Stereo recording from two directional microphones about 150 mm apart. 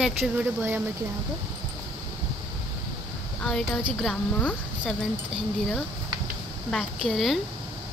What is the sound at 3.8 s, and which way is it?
A woman's voice, centre (ahead or behind).